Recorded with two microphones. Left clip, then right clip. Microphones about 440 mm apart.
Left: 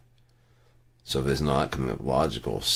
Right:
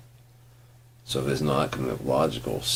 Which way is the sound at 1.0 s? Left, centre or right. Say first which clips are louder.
Even; left.